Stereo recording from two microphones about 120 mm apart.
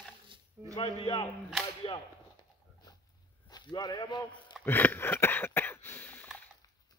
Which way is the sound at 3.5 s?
35° left (ahead or behind).